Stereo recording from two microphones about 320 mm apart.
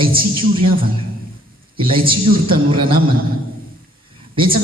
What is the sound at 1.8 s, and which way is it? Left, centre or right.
A man's voice, centre.